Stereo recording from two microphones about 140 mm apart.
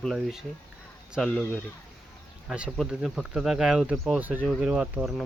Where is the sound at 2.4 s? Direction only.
5° right (ahead or behind).